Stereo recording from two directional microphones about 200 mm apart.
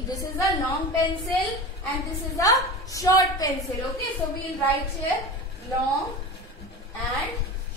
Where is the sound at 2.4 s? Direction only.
15° left (ahead or behind).